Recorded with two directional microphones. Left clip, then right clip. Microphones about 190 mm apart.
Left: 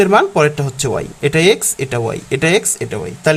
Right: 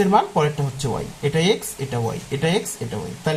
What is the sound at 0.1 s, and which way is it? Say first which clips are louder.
Speech: left 6 dB; 55° left (ahead or behind).